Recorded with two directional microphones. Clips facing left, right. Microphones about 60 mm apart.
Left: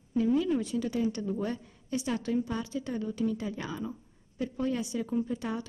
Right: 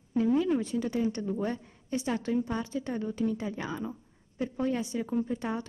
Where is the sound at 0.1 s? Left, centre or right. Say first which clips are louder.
Right 1 dB; right.